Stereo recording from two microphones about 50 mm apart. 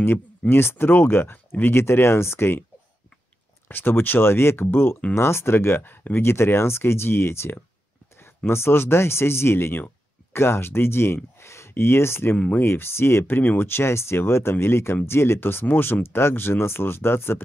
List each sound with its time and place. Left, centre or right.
0.5 s speech: left
3.6 s speech: left
6.2 s speech: left
13.3 s speech: left
15.6 s speech: left